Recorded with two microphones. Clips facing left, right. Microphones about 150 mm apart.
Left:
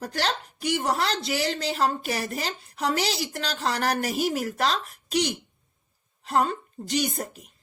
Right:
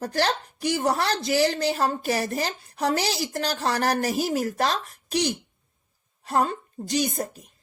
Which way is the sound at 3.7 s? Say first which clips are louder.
Right 2 dB; 40° right (ahead or behind).